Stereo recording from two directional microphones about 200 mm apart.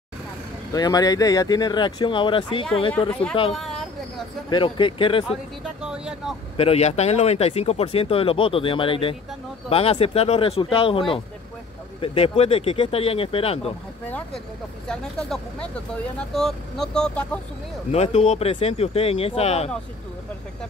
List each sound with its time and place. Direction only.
0.7 s speech: 20° left (ahead or behind)
3.1 s speech: 5° left (ahead or behind)
3.5 s a sound: centre (ahead or behind)
4.5 s speech: 25° left (ahead or behind)
5.3 s speech: 5° right (ahead or behind)
6.5 s speech: 30° left (ahead or behind)
14.0 s speech: 5° left (ahead or behind)
17.9 s speech: 30° left (ahead or behind)